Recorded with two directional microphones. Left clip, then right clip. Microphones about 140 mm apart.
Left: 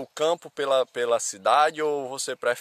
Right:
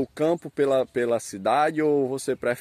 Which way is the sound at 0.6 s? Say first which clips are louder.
Right 2 dB; 35° left (ahead or behind).